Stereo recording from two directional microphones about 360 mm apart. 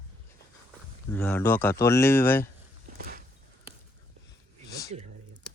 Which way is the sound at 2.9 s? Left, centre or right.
Right.